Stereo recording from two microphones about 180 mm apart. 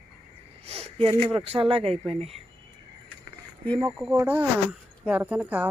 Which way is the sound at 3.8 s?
20° right (ahead or behind).